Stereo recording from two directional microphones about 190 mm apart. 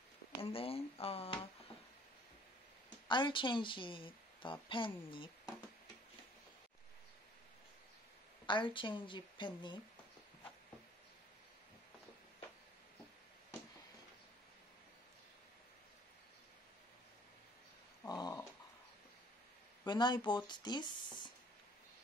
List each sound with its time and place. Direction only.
0.4 s speech: 30° left (ahead or behind)
3.1 s a woman's voice: 25° left (ahead or behind)
8.5 s a woman's voice: 25° left (ahead or behind)
18.0 s dog: 20° left (ahead or behind)
19.9 s a woman's voice: 20° left (ahead or behind)